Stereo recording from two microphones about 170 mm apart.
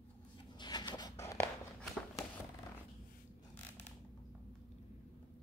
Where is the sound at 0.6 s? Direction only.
25° left (ahead or behind).